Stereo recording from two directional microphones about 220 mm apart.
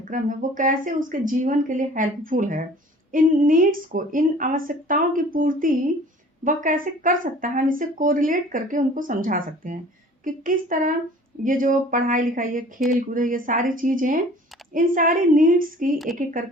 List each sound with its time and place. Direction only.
0.0 s speech: 35° right (ahead or behind)